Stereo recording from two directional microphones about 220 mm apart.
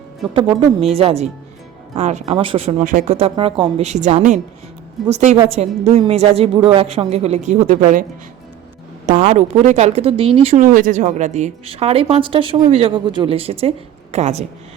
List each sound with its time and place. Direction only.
0.3 s a woman's voice: 25° right (ahead or behind)
9.0 s speech: 35° right (ahead or behind)